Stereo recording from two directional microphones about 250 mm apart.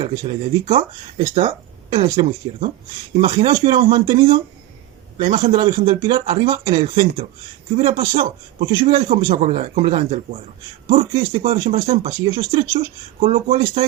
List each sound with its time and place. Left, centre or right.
0.0 s speech: centre
8.1 s a man's voice: right; by 12.9 s centre
13.1 s speech: right